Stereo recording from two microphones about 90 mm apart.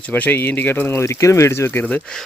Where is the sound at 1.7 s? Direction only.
20° left (ahead or behind).